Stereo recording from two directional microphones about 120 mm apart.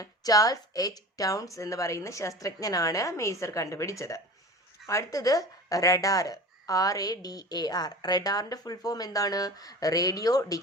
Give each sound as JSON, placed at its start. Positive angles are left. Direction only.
{"t": 0.0, "sound": "speech", "side_deg": 30}